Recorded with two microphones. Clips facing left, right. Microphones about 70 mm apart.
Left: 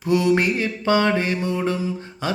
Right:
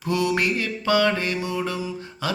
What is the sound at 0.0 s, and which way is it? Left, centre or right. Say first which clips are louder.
Mantra: left 4 dB; left.